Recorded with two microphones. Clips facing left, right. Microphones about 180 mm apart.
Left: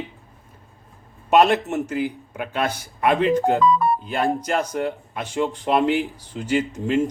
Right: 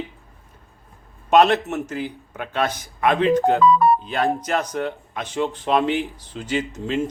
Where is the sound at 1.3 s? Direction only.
10° left (ahead or behind).